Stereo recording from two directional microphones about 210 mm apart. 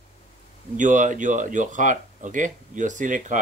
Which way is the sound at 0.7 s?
35° right (ahead or behind).